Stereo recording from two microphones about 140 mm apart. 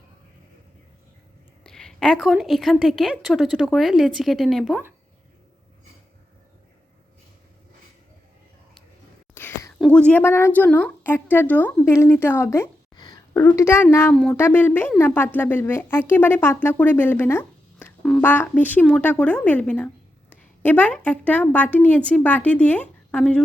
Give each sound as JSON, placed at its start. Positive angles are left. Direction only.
{"t": 1.6, "sound": "a woman's voice", "side_deg": 5}
{"t": 9.3, "sound": "whispering", "side_deg": 20}
{"t": 9.7, "sound": "a woman's voice", "side_deg": 5}
{"t": 14.1, "sound": "a woman's voice", "side_deg": 5}
{"t": 14.3, "sound": "a woman's voice", "side_deg": 15}